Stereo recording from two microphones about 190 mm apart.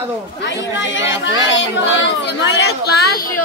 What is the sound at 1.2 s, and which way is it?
Speech, 75° left (ahead or behind).